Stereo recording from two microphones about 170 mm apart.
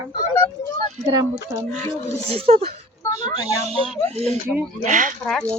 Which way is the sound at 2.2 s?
35° right (ahead or behind).